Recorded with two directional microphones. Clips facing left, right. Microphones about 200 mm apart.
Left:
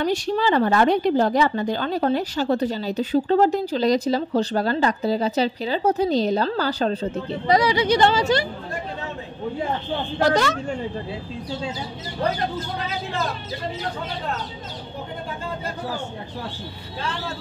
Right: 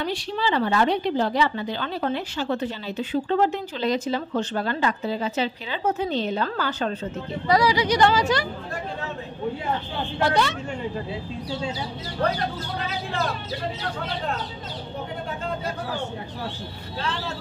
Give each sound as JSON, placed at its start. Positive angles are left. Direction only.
{"t": 0.0, "sound": "a woman's voice", "side_deg": 45}
{"t": 7.4, "sound": "speech", "side_deg": 20}
{"t": 10.1, "sound": "a woman's voice", "side_deg": 40}